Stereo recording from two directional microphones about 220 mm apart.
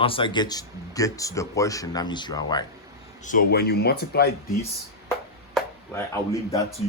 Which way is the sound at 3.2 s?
40° left (ahead or behind).